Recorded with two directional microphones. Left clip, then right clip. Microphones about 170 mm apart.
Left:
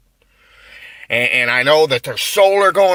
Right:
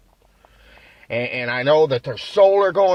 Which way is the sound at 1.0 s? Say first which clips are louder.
Left 9 dB; 15° left (ahead or behind).